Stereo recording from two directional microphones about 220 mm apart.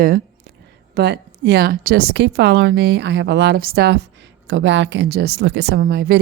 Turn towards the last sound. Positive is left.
turn(degrees=-45)  # may be behind; listen again after turning